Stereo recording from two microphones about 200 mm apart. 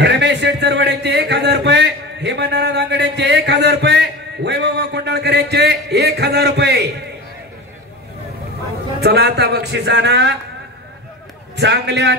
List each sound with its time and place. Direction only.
0.0 s speech: 60° right (ahead or behind)
9.0 s speech: 55° right (ahead or behind)
11.5 s speech: 60° right (ahead or behind)